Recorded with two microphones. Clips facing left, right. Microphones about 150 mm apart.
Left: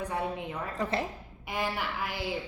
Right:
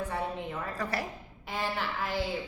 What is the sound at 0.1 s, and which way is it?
A woman's voice, 15° left (ahead or behind).